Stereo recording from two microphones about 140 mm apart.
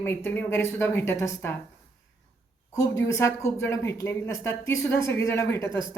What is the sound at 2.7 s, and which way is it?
Speech, 25° left (ahead or behind).